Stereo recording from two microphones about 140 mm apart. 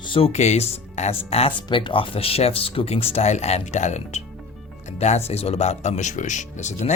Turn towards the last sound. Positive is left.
turn(degrees=55)  # may be behind; listen again after turning